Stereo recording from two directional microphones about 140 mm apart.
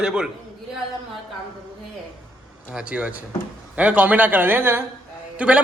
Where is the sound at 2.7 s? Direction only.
5° right (ahead or behind).